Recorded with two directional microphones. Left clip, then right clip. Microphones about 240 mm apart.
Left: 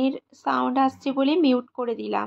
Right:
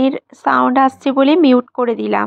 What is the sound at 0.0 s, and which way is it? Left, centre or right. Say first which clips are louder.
Speech: right 10 dB; right.